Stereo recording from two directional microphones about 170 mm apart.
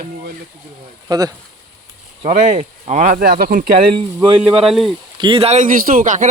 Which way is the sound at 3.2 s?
65° right (ahead or behind).